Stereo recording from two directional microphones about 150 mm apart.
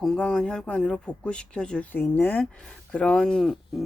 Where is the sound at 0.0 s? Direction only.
5° left (ahead or behind).